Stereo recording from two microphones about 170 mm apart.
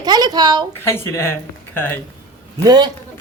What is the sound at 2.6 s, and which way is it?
Speech, 25° right (ahead or behind).